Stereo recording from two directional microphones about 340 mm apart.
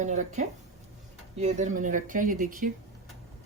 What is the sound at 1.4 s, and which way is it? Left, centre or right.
Speech, right.